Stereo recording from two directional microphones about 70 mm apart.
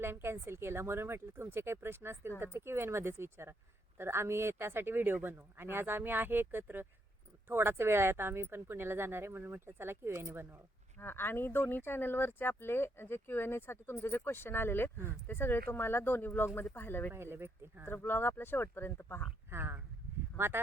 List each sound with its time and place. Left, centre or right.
0.0 s speech: right
11.0 s speech: left
17.1 s speech: right
17.8 s speech: left
19.5 s speech: right